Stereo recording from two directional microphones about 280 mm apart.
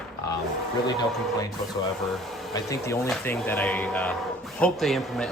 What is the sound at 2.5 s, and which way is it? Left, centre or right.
Speech, centre.